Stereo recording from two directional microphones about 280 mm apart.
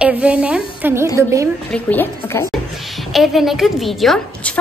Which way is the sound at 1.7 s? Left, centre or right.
Centre.